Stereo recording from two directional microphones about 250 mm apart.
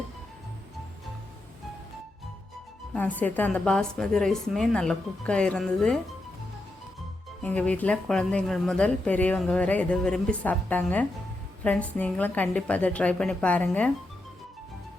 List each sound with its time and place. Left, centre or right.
2.9 s a woman's voice: centre
7.4 s a woman's voice: centre